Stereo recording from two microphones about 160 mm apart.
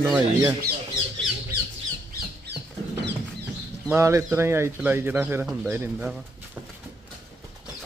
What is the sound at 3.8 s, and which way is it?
Speech, 15° right (ahead or behind).